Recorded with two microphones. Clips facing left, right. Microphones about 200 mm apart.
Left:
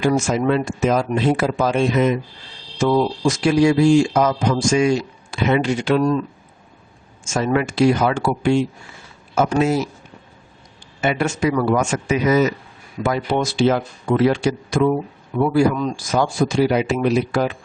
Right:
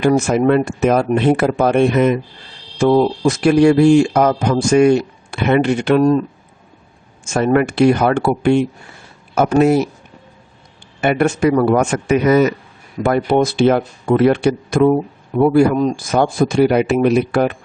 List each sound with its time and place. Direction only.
0.0 s speech: 60° right (ahead or behind)
7.3 s speech: 55° right (ahead or behind)
11.0 s speech: 55° right (ahead or behind)